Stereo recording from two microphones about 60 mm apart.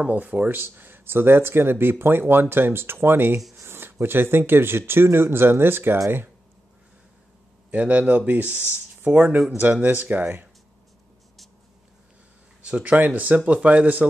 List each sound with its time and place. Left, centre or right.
0.0 s speech: right
7.7 s speech: right
12.6 s speech: right